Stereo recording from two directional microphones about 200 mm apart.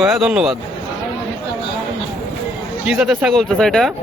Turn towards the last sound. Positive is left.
turn(degrees=0)  # may be behind; listen again after turning